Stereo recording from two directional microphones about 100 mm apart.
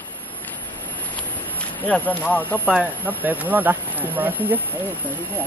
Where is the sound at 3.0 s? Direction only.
20° right (ahead or behind).